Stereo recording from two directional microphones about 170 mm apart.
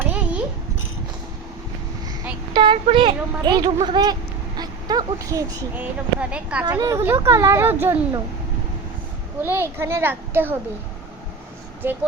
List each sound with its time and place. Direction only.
0.1 s a sound: 5° right (ahead or behind)
2.5 s a woman's voice: 30° right (ahead or behind)
5.7 s a woman's voice: 10° right (ahead or behind)
6.7 s a woman's voice: 20° right (ahead or behind)
9.4 s a woman's voice: 15° right (ahead or behind)
11.8 s a woman's voice: 15° right (ahead or behind)